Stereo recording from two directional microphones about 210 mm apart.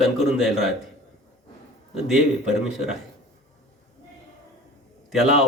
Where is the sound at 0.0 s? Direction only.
Centre (ahead or behind).